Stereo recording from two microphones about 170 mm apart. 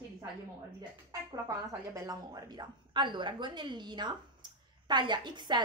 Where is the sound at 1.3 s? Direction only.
20° right (ahead or behind).